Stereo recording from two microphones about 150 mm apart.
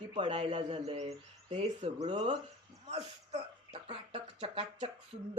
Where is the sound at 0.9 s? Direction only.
50° right (ahead or behind).